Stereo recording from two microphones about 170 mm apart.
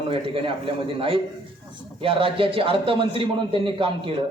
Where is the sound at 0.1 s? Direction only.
30° right (ahead or behind).